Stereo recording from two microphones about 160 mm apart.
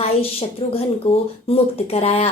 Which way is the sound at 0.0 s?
40° left (ahead or behind).